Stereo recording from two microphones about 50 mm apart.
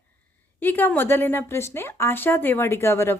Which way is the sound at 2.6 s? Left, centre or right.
Left.